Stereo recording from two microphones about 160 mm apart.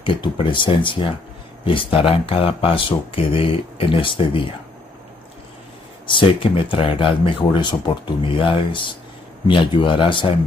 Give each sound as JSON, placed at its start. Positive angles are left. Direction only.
{"t": 0.0, "sound": "speech", "side_deg": 30}
{"t": 6.0, "sound": "speech", "side_deg": 30}